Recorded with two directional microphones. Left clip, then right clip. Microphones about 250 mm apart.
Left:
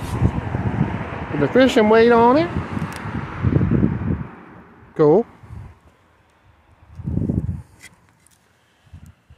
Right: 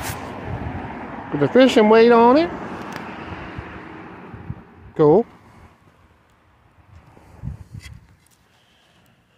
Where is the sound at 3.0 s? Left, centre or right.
Left.